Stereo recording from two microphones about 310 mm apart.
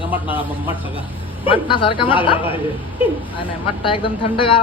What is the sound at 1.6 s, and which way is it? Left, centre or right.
Speech, centre.